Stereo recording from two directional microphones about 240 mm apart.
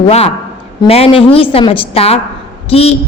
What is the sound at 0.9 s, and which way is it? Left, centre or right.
A woman's voice, left.